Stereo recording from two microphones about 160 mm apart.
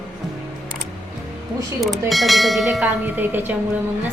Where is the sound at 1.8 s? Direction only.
Centre (ahead or behind).